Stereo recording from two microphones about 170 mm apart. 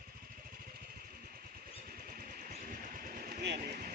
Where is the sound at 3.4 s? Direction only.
80° right.